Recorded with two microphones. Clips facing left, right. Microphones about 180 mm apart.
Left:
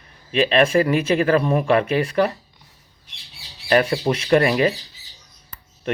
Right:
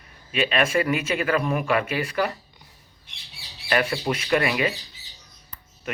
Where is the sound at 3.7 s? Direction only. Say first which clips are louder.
Left 6 dB; 35° left (ahead or behind).